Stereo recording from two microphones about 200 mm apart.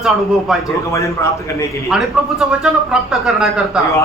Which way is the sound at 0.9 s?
15° left (ahead or behind).